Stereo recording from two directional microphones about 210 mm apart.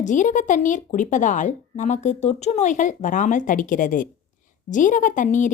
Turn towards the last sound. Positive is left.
turn(degrees=35)  # may be behind; listen again after turning